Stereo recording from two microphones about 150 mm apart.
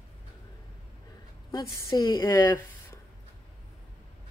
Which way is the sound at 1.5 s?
25° left (ahead or behind).